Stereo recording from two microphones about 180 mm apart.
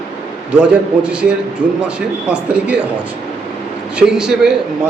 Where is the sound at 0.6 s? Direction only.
5° right (ahead or behind).